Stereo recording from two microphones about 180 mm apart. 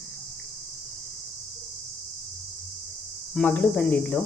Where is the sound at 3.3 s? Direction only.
10° left (ahead or behind).